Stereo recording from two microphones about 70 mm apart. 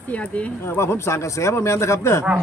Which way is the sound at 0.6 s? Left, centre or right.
Left.